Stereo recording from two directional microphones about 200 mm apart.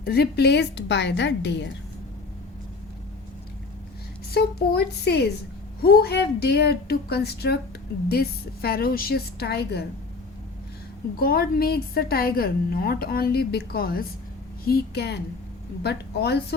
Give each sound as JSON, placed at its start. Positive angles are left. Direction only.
{"t": 0.0, "sound": "a woman's voice", "side_deg": 50}
{"t": 4.4, "sound": "a woman's voice", "side_deg": 55}
{"t": 11.2, "sound": "a woman's voice", "side_deg": 50}